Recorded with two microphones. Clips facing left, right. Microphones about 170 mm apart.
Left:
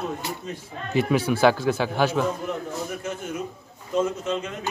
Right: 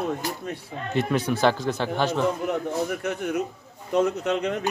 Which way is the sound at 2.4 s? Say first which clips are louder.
Right 4 dB; 65° right (ahead or behind).